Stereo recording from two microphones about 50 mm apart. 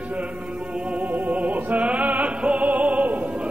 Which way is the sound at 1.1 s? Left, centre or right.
Right.